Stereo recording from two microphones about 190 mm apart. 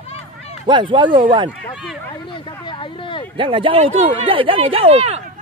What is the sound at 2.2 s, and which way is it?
Speech, 25° left (ahead or behind).